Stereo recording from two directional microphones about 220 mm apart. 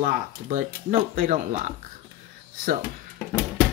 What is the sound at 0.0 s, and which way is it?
Speech, 35° right (ahead or behind).